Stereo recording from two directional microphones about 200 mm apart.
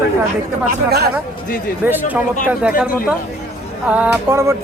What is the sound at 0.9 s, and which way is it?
Speech, 55° right (ahead or behind).